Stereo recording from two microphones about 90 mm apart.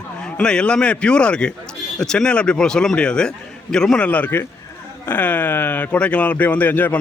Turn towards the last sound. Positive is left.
turn(degrees=20)  # may be behind; listen again after turning